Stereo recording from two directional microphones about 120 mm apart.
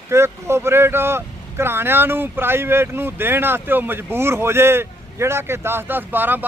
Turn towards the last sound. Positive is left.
turn(degrees=-15)  # may be behind; listen again after turning